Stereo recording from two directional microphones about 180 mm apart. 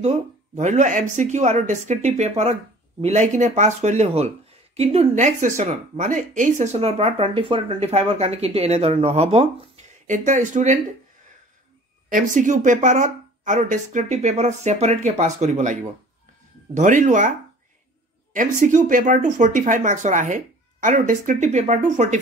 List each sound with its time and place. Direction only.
0.0 s speech: 40° right (ahead or behind)
12.1 s speech: 45° right (ahead or behind)
18.3 s speech: 45° right (ahead or behind)